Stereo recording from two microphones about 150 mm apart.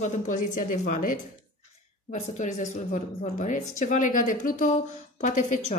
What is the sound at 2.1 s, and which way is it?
Speech, 50° left (ahead or behind).